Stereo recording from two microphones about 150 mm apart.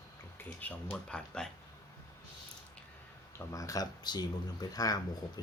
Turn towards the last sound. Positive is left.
turn(degrees=25)  # may be behind; listen again after turning